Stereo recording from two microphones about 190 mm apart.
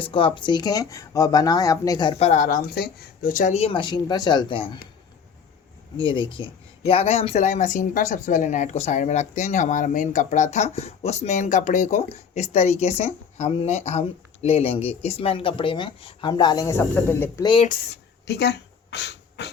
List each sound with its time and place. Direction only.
0.0 s speech: 25° left (ahead or behind)
6.0 s speech: 25° left (ahead or behind)
17.7 s a sound: 60° left (ahead or behind)